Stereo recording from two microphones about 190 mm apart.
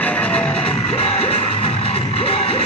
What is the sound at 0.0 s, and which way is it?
Music, 5° left (ahead or behind).